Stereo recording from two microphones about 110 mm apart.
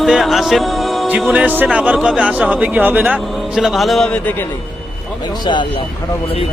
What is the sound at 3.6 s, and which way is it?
Speech, centre (ahead or behind).